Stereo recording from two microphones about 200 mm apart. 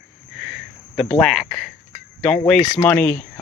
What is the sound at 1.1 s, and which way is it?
Speech, centre (ahead or behind).